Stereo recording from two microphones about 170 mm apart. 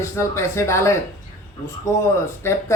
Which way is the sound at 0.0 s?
15° left (ahead or behind).